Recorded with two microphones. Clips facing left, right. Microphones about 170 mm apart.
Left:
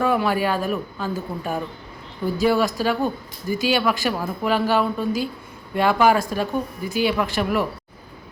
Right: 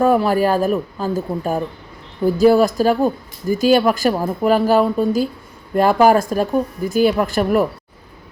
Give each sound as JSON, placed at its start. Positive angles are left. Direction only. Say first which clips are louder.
{"t": 0.0, "sound": "speech", "louder": "right 6 dB", "side_deg": -40}